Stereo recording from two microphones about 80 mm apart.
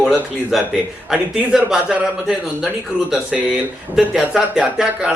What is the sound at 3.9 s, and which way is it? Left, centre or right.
A man's voice, centre.